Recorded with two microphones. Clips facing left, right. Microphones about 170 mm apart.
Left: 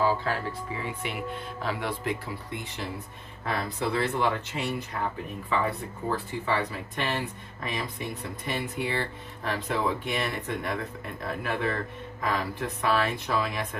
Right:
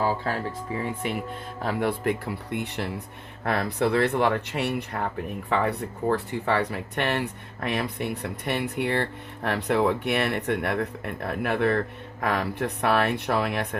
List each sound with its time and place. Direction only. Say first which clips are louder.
0.8 s speech: right 4 dB; 45° right (ahead or behind); by 13.7 s 65° right (ahead or behind)